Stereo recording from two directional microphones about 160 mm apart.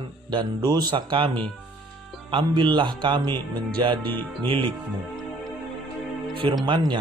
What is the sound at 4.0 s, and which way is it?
Speech, 10° left (ahead or behind).